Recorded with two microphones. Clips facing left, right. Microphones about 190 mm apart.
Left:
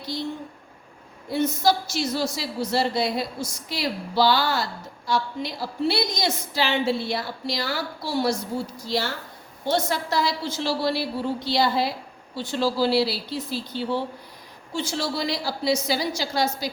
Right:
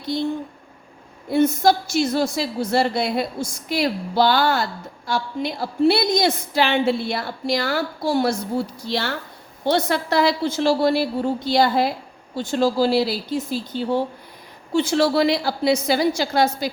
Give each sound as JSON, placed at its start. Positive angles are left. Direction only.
{"t": 1.3, "sound": "a woman's voice", "side_deg": -55}
{"t": 14.7, "sound": "a woman's voice", "side_deg": -60}